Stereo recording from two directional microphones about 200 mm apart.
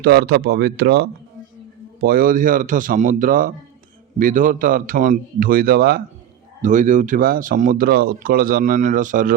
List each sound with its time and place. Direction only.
0.0 s a man's voice: 50° right (ahead or behind)
6.6 s speech: 40° right (ahead or behind)